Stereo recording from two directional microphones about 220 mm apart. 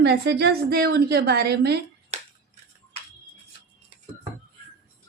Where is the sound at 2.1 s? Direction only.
30° right (ahead or behind).